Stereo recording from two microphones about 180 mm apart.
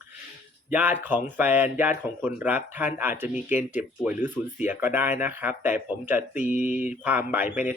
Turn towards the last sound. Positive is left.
turn(degrees=-10)  # may be behind; listen again after turning